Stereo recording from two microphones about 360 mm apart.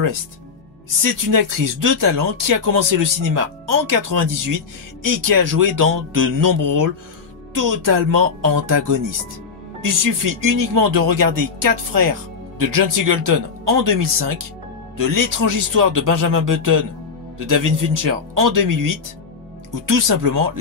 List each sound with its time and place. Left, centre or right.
1.0 s speech: right